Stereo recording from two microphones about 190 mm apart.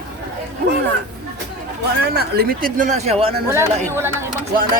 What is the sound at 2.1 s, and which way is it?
Speech, 55° right (ahead or behind).